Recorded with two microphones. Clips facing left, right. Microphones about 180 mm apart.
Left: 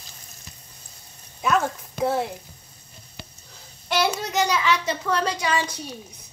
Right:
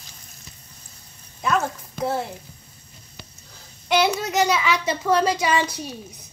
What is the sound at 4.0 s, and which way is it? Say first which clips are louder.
A child's voice: right 1 dB; 5° right (ahead or behind).